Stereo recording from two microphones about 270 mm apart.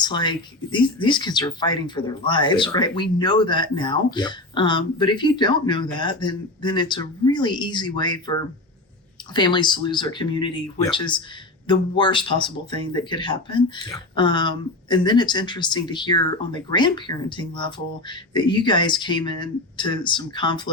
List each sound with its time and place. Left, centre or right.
0.0 s speech: centre